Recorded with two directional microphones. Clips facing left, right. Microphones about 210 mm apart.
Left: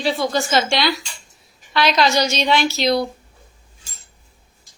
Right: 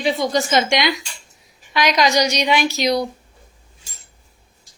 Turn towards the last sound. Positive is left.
turn(degrees=-15)  # may be behind; listen again after turning